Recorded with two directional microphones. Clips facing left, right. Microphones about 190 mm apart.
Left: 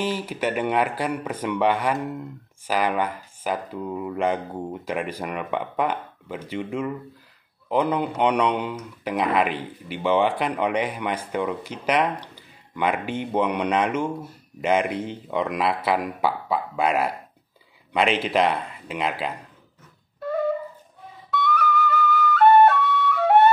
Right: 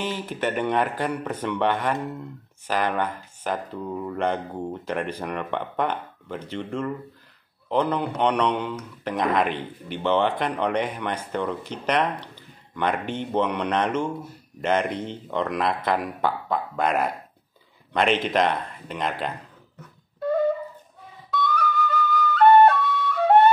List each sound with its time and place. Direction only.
0.0 s speech: 10° left (ahead or behind)
21.3 s flute: 5° left (ahead or behind)